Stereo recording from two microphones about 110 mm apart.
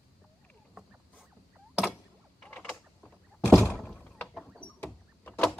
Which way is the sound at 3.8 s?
5° left (ahead or behind).